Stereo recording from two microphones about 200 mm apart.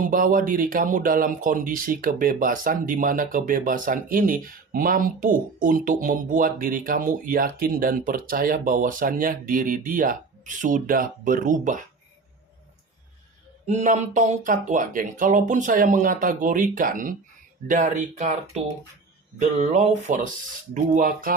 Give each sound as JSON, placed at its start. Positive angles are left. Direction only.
{"t": 0.0, "sound": "speech", "side_deg": -45}
{"t": 13.7, "sound": "speech", "side_deg": -35}
{"t": 19.4, "sound": "speech", "side_deg": -35}